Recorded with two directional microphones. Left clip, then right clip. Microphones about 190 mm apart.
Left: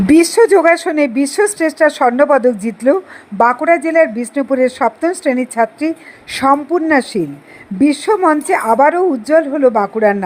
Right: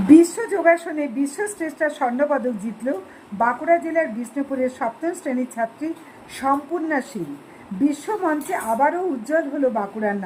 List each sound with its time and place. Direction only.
0.1 s speech: 35° left (ahead or behind)